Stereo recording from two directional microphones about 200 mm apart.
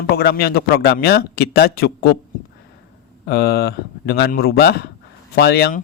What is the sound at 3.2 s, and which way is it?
A man's voice, 50° left (ahead or behind).